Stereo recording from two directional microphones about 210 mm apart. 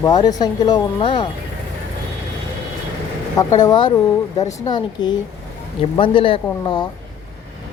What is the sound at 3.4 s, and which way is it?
Speech, 15° left (ahead or behind).